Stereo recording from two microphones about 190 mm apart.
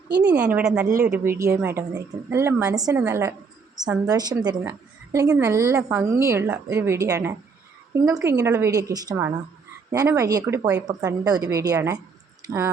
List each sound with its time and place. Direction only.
0.3 s a woman's voice: 5° right (ahead or behind)